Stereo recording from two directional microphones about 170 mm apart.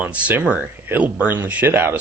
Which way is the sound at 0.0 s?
10° right (ahead or behind).